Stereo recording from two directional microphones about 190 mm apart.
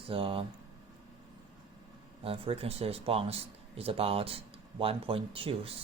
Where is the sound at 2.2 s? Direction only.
30° right (ahead or behind).